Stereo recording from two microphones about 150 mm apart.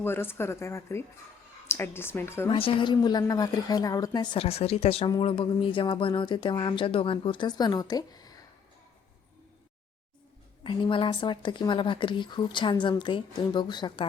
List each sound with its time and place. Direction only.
0.0 s a woman's voice: 15° left (ahead or behind)
2.5 s a woman's voice: 35° left (ahead or behind)
10.6 s speech: 35° left (ahead or behind)